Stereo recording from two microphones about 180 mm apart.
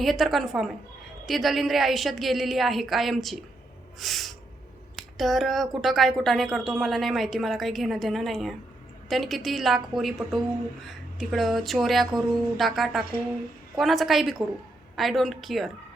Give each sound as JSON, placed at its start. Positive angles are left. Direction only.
{"t": 0.0, "sound": "a woman's voice", "side_deg": 0}